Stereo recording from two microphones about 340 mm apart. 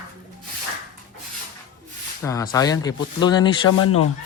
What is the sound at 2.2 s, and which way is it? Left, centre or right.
Speech, centre.